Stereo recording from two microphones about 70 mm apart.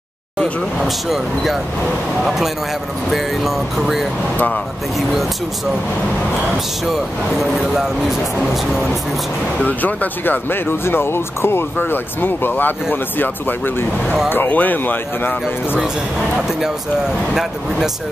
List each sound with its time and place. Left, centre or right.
0.8 s speech: centre
6.9 s speech: centre
9.6 s speech: left
17.3 s speech: centre